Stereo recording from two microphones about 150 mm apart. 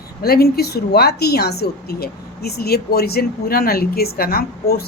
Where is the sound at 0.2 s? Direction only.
90° left.